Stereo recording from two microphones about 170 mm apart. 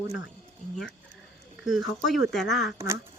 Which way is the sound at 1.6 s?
Centre (ahead or behind).